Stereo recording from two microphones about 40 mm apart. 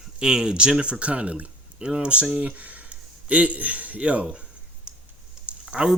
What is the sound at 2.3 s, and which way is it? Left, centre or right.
Speech, right.